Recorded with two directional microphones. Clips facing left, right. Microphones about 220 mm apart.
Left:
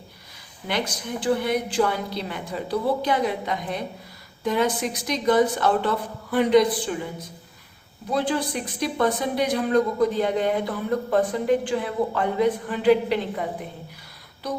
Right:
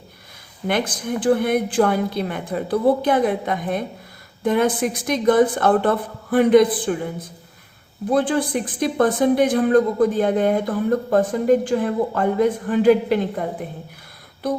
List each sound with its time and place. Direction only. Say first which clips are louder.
0.7 s speech: right 5 dB; 50° right (ahead or behind)